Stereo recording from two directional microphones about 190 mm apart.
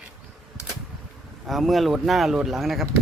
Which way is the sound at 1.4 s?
Centre (ahead or behind).